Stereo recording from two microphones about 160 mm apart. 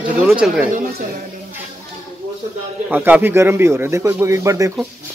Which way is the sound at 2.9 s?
10° right (ahead or behind).